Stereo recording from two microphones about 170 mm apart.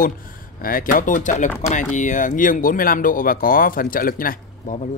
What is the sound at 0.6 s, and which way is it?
Speech, 55° left (ahead or behind).